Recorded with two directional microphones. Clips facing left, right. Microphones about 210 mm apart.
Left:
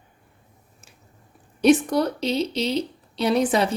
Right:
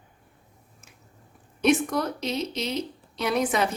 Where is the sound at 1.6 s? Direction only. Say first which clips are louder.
Left 5 dB; 35° left (ahead or behind).